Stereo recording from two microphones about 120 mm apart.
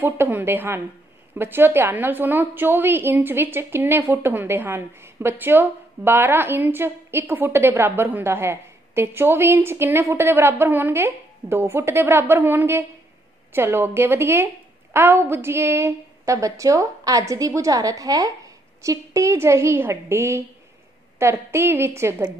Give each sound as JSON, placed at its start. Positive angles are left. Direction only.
{"t": 0.0, "sound": "a woman's voice", "side_deg": -15}